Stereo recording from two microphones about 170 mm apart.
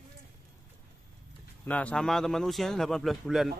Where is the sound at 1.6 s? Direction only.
10° left (ahead or behind).